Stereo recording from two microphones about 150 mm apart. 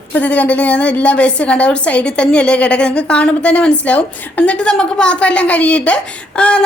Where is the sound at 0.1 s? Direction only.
10° left (ahead or behind).